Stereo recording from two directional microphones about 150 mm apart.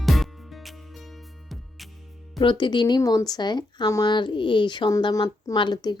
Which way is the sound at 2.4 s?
30° left (ahead or behind).